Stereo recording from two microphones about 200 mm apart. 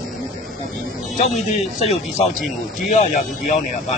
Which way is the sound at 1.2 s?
35° left (ahead or behind).